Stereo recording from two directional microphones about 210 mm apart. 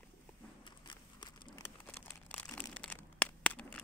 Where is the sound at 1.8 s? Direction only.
5° left (ahead or behind).